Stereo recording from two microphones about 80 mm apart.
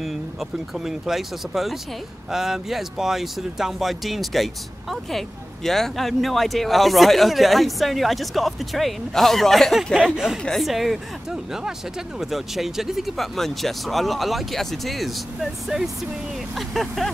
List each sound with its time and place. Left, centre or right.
0.0 s speech: centre